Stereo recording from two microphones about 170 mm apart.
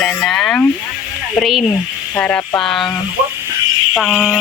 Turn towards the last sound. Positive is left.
turn(degrees=0)  # may be behind; listen again after turning